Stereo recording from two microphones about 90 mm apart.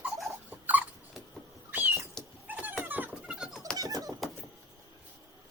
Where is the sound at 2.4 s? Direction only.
20° right (ahead or behind).